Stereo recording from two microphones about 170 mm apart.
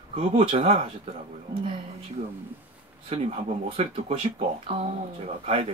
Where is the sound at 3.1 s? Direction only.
35° right (ahead or behind).